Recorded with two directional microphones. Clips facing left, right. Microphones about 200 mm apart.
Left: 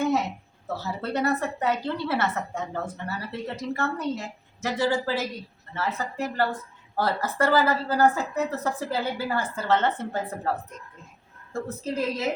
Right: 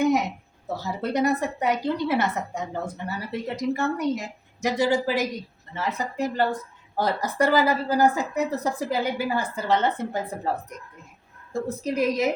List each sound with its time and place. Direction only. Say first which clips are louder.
0.0 s a sound: right 3 dB; 15° right (ahead or behind)
0.7 s a woman's voice: right 2 dB; 15° right (ahead or behind)
11.8 s a woman's voice: right 5 dB; 15° right (ahead or behind)